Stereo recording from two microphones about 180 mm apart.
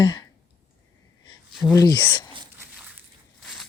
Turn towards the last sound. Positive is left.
turn(degrees=0)  # may be behind; listen again after turning